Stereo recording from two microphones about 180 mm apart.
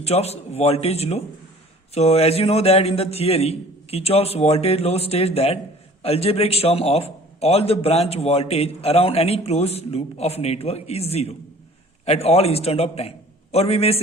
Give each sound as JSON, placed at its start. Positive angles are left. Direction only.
{"t": 0.0, "sound": "a man's voice", "side_deg": 35}